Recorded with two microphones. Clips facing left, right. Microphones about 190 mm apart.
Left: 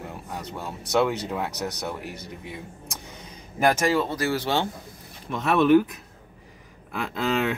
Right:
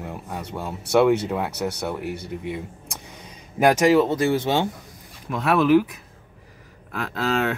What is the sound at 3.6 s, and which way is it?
Speech, 15° right (ahead or behind).